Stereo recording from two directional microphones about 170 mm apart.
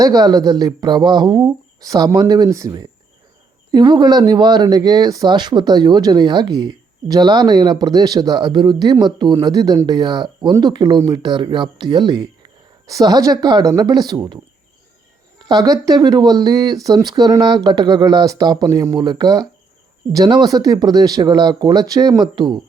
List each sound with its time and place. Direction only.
0.0 s speech: 20° right (ahead or behind)
15.4 s speech: 25° right (ahead or behind)